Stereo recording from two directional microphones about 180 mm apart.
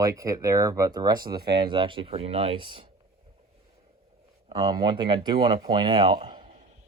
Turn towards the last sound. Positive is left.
turn(degrees=-25)  # may be behind; listen again after turning